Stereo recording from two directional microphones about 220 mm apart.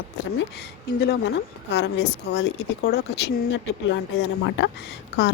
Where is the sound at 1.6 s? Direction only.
50° left (ahead or behind).